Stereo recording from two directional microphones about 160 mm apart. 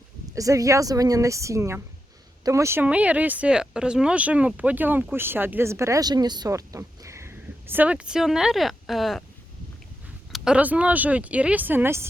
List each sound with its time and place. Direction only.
0.3 s a woman's voice: 20° right (ahead or behind); by 9.2 s centre (ahead or behind)
10.3 s speech: 5° right (ahead or behind)